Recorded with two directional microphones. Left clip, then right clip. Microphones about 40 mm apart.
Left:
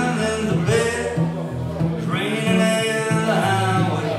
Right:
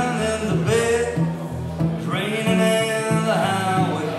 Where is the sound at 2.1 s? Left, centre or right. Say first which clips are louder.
Left 1 dB; centre.